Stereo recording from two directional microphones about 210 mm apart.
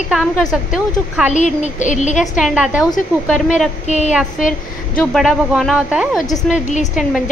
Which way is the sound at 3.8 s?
35° left (ahead or behind).